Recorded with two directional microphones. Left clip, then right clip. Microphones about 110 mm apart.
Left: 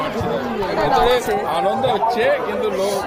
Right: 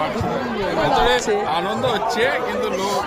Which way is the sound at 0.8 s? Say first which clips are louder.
Left 1 dB; 25° right (ahead or behind).